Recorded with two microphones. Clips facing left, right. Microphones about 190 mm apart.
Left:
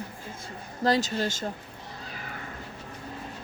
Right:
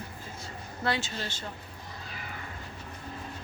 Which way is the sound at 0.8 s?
40° left (ahead or behind).